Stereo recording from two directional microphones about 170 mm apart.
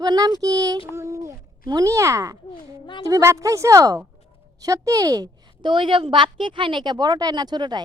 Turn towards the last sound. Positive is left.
turn(degrees=-25)  # may be behind; listen again after turning